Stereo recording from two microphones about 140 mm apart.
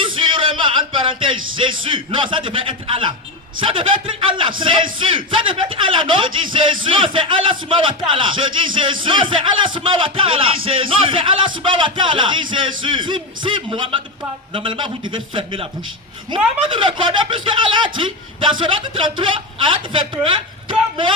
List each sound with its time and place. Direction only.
0.2 s a sound: 45° right (ahead or behind)
0.5 s speech: 35° right (ahead or behind)
16.6 s speech: 35° right (ahead or behind)